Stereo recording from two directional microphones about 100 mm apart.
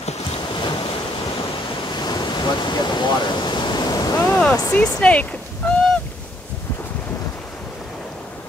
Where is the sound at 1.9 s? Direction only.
45° left (ahead or behind).